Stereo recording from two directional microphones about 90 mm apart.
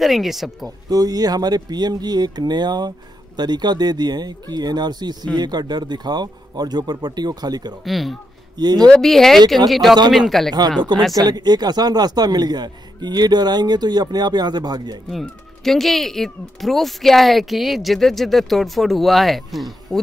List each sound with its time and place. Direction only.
0.0 s speech: centre (ahead or behind)
0.7 s speech: 45° right (ahead or behind)
7.8 s speech: centre (ahead or behind)
11.1 s speech: 50° right (ahead or behind)
15.0 s speech: centre (ahead or behind)